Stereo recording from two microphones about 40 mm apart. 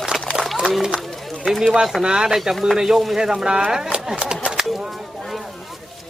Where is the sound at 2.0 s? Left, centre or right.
Centre.